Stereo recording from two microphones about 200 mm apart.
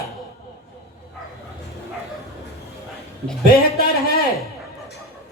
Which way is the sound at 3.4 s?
50° left (ahead or behind).